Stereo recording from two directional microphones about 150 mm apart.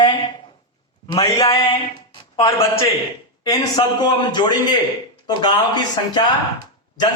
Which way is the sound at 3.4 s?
25° left (ahead or behind).